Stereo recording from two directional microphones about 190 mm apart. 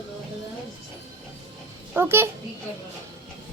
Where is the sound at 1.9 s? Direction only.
10° right (ahead or behind).